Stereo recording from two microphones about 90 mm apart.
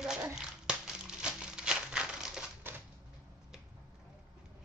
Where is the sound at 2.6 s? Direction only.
25° right (ahead or behind).